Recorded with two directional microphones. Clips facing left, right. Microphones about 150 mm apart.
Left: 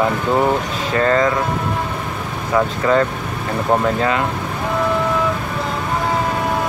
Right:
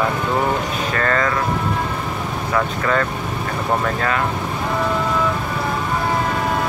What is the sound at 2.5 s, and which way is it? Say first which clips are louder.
Speech: left 5 dB; 20° left (ahead or behind).